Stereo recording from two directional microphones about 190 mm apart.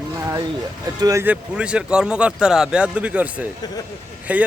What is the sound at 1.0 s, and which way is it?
Speech, 15° right (ahead or behind).